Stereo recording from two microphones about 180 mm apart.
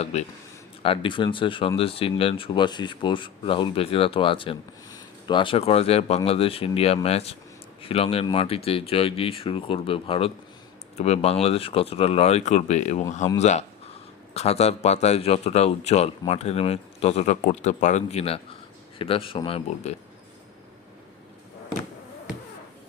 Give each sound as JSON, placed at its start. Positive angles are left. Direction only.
{"t": 0.0, "sound": "speech", "side_deg": 35}